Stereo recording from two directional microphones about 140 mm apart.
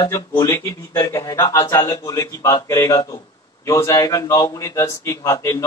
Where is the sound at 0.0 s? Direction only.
25° left (ahead or behind).